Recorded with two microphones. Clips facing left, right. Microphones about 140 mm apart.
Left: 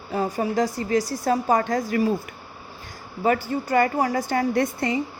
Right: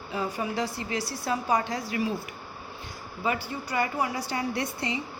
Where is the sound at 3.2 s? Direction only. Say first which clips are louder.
Left 8 dB; 45° left (ahead or behind).